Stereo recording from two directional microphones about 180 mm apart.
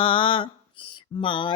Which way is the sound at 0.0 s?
30° left (ahead or behind).